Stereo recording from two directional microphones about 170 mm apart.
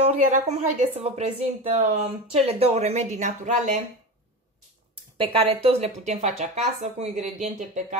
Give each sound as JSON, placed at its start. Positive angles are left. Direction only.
{"t": 0.0, "sound": "a woman's voice", "side_deg": -35}
{"t": 5.1, "sound": "speech", "side_deg": -30}